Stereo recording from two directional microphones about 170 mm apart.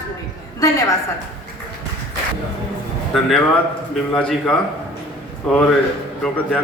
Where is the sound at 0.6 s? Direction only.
20° left (ahead or behind).